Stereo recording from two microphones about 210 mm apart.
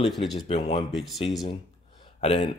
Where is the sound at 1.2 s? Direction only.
20° left (ahead or behind).